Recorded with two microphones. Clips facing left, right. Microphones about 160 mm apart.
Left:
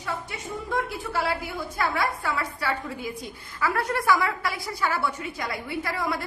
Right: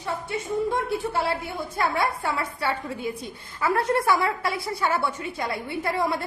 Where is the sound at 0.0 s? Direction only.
30° right (ahead or behind).